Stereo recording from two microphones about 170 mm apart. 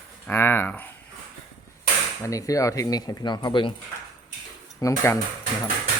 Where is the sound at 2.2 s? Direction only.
20° left (ahead or behind).